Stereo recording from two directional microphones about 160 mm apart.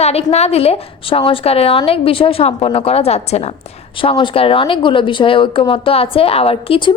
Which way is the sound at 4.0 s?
30° left (ahead or behind).